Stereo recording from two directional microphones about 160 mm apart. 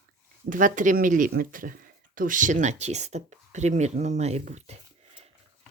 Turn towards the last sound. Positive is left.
turn(degrees=-45)  # may be behind; listen again after turning